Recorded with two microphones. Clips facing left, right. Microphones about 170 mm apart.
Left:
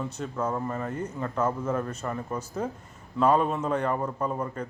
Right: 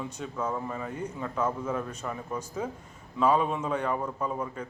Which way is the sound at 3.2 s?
5° right (ahead or behind).